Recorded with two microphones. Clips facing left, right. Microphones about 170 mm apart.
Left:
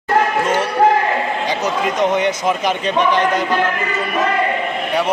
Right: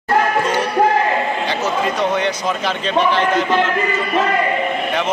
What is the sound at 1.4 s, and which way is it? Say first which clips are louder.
A man's voice: even; 15° left (ahead or behind).